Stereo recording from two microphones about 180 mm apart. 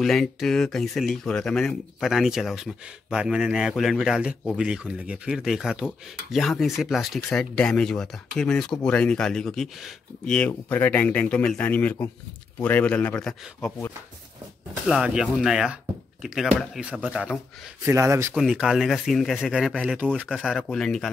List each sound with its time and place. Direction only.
0.0 s speech: centre (ahead or behind)
14.9 s speech: 5° right (ahead or behind)
17.8 s speech: 15° right (ahead or behind)
18.3 s speech: 5° right (ahead or behind)